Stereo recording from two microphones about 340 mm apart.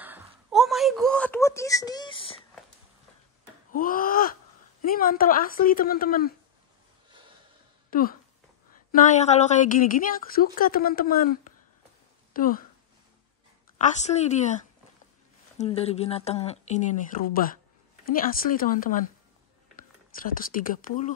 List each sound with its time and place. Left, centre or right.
0.0 s wail: centre
3.7 s gasp: left
4.8 s speech: left
7.9 s speech: left
12.4 s speech: left
13.7 s speech: left
20.3 s speech: left